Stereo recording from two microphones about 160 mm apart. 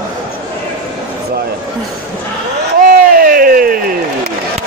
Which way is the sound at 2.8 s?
65° right (ahead or behind).